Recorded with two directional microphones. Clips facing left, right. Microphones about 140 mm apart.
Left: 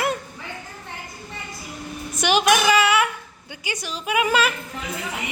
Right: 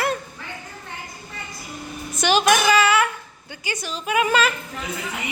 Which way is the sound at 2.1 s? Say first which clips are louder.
Even; 10° left (ahead or behind).